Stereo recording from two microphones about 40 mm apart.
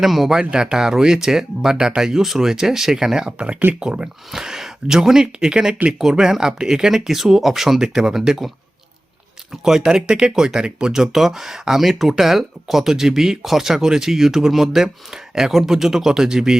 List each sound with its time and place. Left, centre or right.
0.0 s speech: centre
0.3 s speech: centre
3.3 s speech: right
4.3 s speech: centre
7.8 s speech: centre
9.5 s speech: centre
10.9 s speech: centre